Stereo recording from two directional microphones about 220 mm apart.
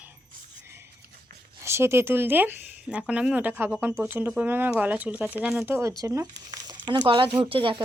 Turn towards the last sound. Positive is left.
turn(degrees=-25)  # may be behind; listen again after turning